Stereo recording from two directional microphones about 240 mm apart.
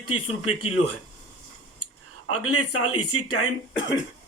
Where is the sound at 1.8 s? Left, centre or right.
Left.